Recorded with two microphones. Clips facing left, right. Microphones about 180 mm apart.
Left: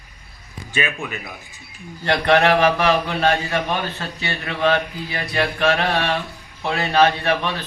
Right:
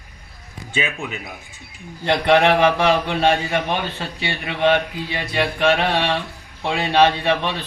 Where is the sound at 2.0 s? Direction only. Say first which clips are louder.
Right 1 dB; 15° right (ahead or behind).